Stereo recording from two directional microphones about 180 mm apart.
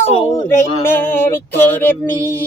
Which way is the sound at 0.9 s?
10° left (ahead or behind).